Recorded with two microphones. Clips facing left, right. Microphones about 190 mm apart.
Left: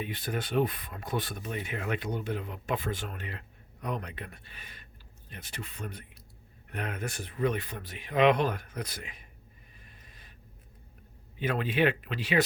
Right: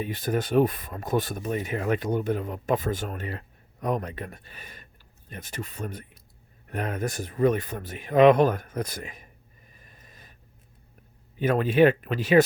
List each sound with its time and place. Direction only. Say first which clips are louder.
0.0 s speech: right 7 dB; 45° right (ahead or behind)
9.7 s snort: right 5 dB; 45° right (ahead or behind)
11.3 s speech: right 8 dB; 45° right (ahead or behind)